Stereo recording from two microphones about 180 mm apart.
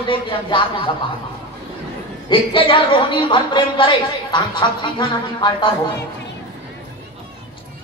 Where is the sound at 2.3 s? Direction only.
30° left (ahead or behind).